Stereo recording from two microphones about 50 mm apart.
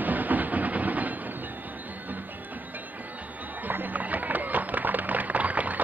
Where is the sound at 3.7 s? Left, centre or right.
Right.